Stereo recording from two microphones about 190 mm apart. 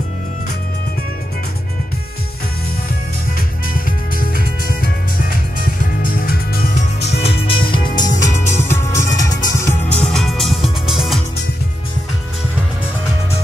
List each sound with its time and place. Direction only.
3.3 s music: 50° left (ahead or behind)
7.4 s music: 25° left (ahead or behind)
8.1 s music: 40° left (ahead or behind)
8.6 s music: 15° left (ahead or behind)
9.7 s music: 5° left (ahead or behind)